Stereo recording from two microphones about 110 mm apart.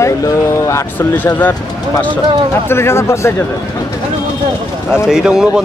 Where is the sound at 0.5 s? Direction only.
25° left (ahead or behind).